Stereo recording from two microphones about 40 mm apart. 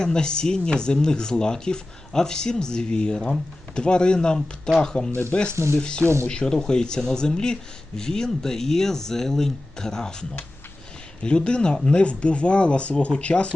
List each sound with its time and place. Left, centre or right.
0.0 s speech: centre
6.0 s speech: right
6.2 s speech: centre